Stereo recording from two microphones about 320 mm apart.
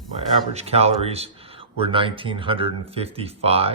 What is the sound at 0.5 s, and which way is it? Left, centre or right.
Speech, centre.